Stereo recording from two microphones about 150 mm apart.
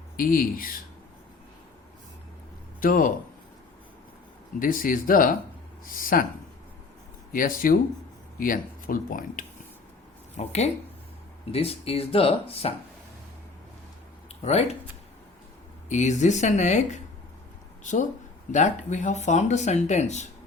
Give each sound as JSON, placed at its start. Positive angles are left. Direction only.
{"t": 0.2, "sound": "speech", "side_deg": 70}
{"t": 2.8, "sound": "speech", "side_deg": 70}
{"t": 4.6, "sound": "speech", "side_deg": 65}
{"t": 7.3, "sound": "speech", "side_deg": 70}
{"t": 10.3, "sound": "speech", "side_deg": 45}
{"t": 14.4, "sound": "speech", "side_deg": 45}
{"t": 15.9, "sound": "speech", "side_deg": 50}
{"t": 18.5, "sound": "speech", "side_deg": 55}